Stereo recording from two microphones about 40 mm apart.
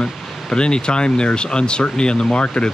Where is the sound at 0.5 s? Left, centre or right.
Left.